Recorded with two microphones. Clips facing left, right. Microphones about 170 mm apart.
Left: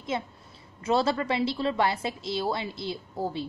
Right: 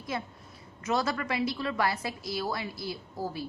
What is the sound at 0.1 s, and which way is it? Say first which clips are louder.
A woman's voice: left 4 dB; 25° left (ahead or behind).